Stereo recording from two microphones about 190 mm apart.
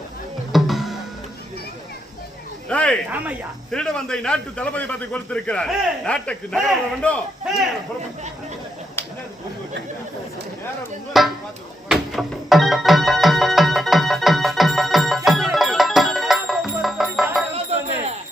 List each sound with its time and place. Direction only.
0.5 s music: centre (ahead or behind)
2.6 s a sound: 5° left (ahead or behind)
3.7 s a man's voice: 5° left (ahead or behind)
11.1 s speech: centre (ahead or behind)
11.9 s music: centre (ahead or behind)
17.5 s music: 35° right (ahead or behind)